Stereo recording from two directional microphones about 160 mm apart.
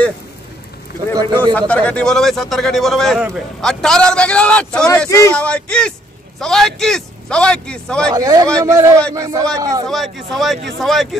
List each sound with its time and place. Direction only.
1.5 s a man's voice: 10° left (ahead or behind)
8.1 s speech: 25° right (ahead or behind)
9.8 s a man's voice: centre (ahead or behind)